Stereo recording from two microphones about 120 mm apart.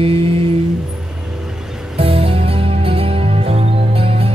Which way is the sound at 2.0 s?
50° right (ahead or behind).